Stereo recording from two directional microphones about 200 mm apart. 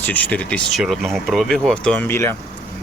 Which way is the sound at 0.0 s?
5° left (ahead or behind).